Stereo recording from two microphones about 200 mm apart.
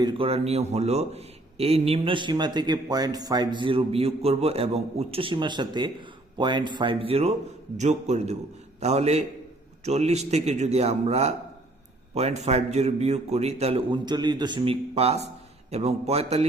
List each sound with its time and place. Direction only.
0.0 s a man's voice: 30° right (ahead or behind)